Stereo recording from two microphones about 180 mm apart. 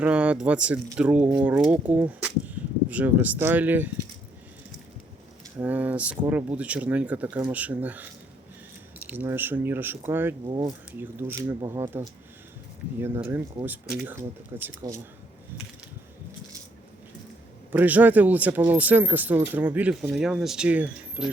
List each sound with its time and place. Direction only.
0.0 s speech: 5° right (ahead or behind)
5.5 s speech: 10° right (ahead or behind)
9.0 s speech: 10° right (ahead or behind)
10.4 s speech: 25° right (ahead or behind)
10.9 s speech: 10° right (ahead or behind)
17.7 s speech: 10° right (ahead or behind)